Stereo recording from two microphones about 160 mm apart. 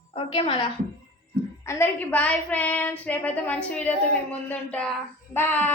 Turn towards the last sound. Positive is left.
turn(degrees=10)  # may be behind; listen again after turning